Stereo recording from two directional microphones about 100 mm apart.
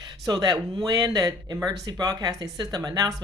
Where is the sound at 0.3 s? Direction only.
40° right (ahead or behind).